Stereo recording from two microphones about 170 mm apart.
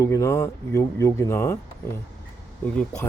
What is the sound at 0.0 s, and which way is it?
Speech, 20° left (ahead or behind).